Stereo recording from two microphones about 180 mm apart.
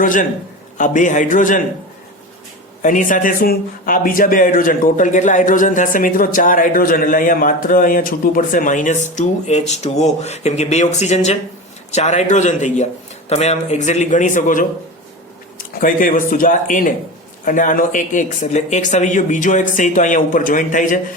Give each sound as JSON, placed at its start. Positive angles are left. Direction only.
{"t": 0.0, "sound": "speech", "side_deg": 50}
{"t": 2.8, "sound": "speech", "side_deg": 45}